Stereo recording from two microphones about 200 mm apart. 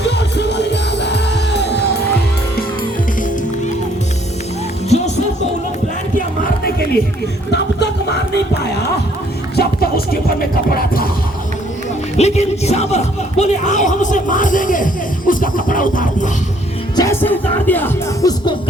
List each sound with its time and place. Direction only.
0.0 s music: 60° left (ahead or behind)
4.9 s music: 35° left (ahead or behind)
7.5 s music: 60° left (ahead or behind)
9.6 s a sound: 50° left (ahead or behind)
10.7 s music: 45° left (ahead or behind)
12.1 s speech: 35° left (ahead or behind)
15.3 s music: 40° left (ahead or behind)
17.0 s music: 10° left (ahead or behind)